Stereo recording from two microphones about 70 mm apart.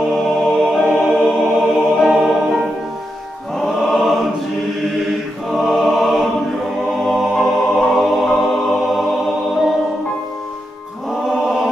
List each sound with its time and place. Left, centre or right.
0.1 s music: centre
0.8 s music: centre
5.5 s choir: centre
7.1 s music: centre
11.2 s choir: centre